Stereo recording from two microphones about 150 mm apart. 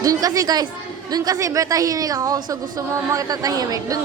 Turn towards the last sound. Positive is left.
turn(degrees=-25)  # may be behind; listen again after turning